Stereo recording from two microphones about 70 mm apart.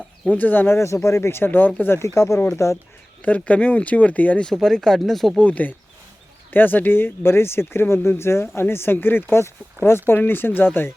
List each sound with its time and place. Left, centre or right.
0.3 s speech: left
0.8 s speech: left
2.1 s speech: left
3.2 s speech: left
4.4 s speech: centre
5.4 s speech: left